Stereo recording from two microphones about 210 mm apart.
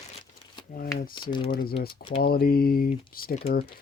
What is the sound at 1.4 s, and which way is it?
Speech, 45° left (ahead or behind).